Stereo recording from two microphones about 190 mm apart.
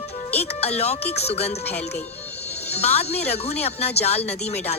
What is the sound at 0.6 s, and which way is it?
Speech, 35° left (ahead or behind).